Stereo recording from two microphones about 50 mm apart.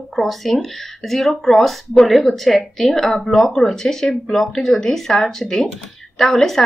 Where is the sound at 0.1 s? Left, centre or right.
Centre.